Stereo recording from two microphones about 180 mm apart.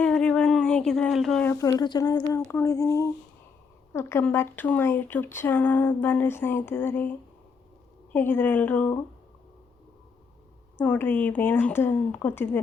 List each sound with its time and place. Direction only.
0.0 s a sound: 5° left (ahead or behind)
1.5 s speech: 20° left (ahead or behind)
10.8 s speech: 10° left (ahead or behind)